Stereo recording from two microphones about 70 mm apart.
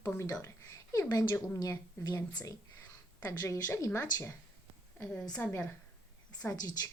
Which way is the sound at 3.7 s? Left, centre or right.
Left.